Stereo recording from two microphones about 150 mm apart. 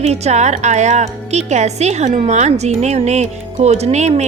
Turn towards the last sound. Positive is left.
turn(degrees=-50)  # may be behind; listen again after turning